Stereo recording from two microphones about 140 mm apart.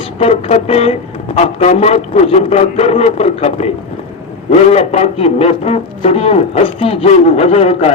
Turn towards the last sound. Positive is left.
turn(degrees=45)  # may be behind; listen again after turning